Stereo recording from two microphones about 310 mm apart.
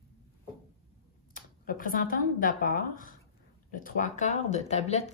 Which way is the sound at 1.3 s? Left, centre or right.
Left.